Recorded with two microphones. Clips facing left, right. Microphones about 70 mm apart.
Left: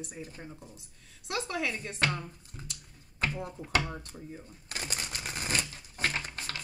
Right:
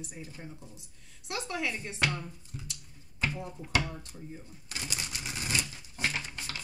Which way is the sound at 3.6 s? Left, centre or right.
Left.